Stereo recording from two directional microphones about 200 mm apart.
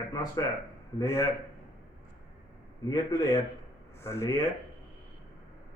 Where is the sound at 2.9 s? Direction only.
20° left (ahead or behind).